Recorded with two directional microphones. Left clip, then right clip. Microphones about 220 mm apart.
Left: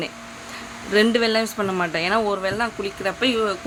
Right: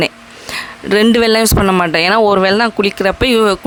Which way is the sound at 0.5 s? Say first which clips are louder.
Right 6 dB; 50° right (ahead or behind).